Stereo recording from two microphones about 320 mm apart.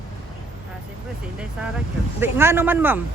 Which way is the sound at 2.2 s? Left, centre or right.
Centre.